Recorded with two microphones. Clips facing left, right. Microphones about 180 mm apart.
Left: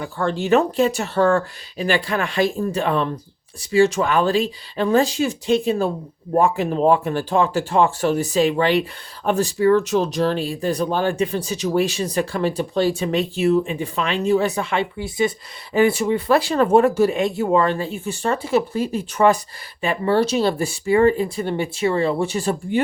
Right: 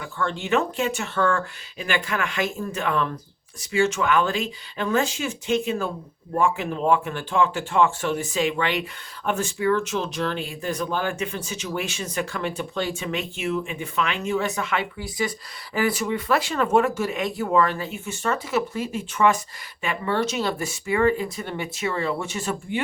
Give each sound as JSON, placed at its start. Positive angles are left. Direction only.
{"t": 0.0, "sound": "speech", "side_deg": 35}